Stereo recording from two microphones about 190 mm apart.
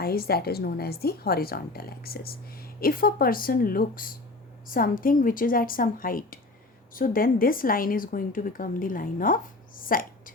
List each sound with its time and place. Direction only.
0.0 s a woman's voice: 55° left (ahead or behind)